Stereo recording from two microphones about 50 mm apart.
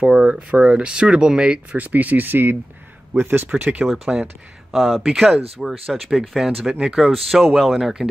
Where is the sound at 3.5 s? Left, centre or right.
Right.